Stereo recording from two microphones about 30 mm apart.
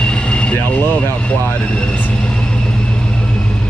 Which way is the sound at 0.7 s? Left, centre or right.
Left.